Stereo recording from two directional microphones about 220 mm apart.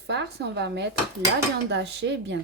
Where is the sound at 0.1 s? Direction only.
50° right (ahead or behind).